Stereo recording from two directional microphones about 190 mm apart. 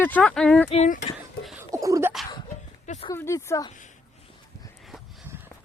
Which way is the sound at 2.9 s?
30° left (ahead or behind).